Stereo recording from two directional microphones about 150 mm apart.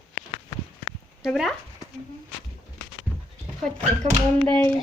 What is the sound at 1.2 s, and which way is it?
Speech, centre (ahead or behind).